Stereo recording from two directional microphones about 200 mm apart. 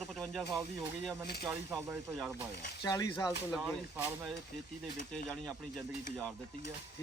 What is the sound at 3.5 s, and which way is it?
Speech, 5° right (ahead or behind).